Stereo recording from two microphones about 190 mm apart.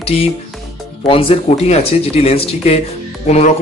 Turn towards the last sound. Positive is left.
turn(degrees=35)  # may be behind; listen again after turning